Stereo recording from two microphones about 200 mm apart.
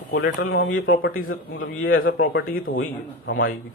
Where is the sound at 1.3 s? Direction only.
85° left.